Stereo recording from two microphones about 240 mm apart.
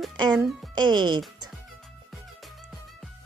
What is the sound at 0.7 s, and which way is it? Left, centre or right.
Speech, centre.